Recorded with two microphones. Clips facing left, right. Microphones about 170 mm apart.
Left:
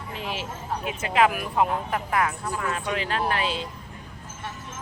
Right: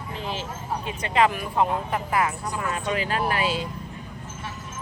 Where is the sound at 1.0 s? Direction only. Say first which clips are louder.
Even; 5° left (ahead or behind).